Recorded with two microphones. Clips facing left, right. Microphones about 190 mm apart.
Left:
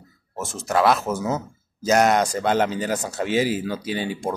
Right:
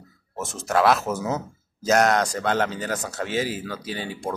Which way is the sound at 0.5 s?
Centre (ahead or behind).